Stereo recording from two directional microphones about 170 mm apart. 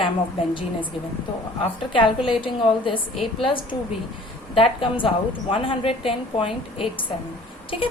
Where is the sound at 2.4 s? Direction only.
30° left (ahead or behind).